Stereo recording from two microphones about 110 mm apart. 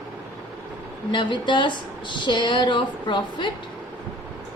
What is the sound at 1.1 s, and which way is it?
A woman's voice, 45° left (ahead or behind).